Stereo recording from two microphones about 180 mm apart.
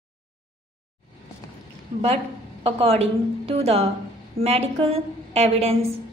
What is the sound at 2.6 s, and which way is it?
A woman's voice, 35° right (ahead or behind).